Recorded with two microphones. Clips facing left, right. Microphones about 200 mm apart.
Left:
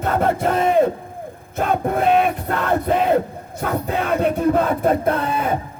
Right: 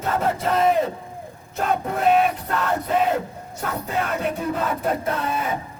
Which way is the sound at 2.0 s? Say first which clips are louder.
Left 1 dB; centre (ahead or behind).